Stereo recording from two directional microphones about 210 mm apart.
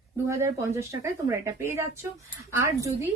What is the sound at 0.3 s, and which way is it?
A woman's voice, 15° right (ahead or behind).